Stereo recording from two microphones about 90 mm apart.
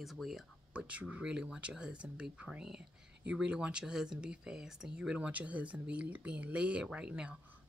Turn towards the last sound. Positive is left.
turn(degrees=-10)  # may be behind; listen again after turning